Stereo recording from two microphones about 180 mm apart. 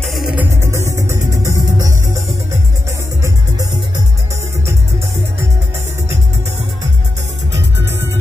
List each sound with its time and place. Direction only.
0.0 s music: centre (ahead or behind)
0.6 s music: 15° right (ahead or behind)
3.2 s music: 20° right (ahead or behind)